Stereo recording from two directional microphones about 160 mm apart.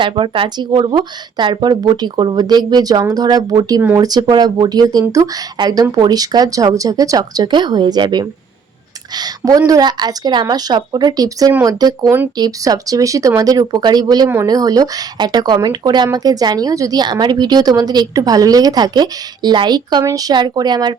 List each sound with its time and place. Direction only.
0.0 s speech: 30° right (ahead or behind)